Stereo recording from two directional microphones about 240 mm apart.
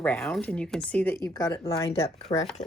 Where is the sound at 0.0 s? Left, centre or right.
Centre; by 2.2 s left.